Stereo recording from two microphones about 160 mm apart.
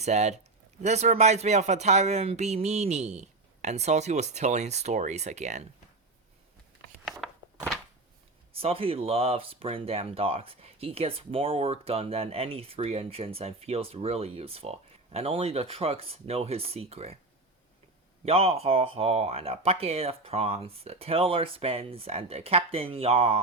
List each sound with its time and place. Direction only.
0.0 s speech: 45° right (ahead or behind)
7.2 s a sound: centre (ahead or behind)
8.5 s speech: 35° right (ahead or behind)
18.3 s speech: 40° right (ahead or behind)